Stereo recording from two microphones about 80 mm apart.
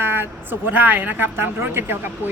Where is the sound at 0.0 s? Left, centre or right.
Right.